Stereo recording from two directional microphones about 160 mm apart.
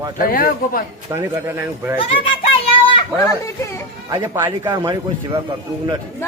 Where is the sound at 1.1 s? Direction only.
15° right (ahead or behind).